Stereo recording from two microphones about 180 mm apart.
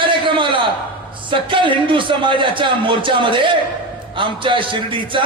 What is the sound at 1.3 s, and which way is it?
A man's voice, 25° right (ahead or behind).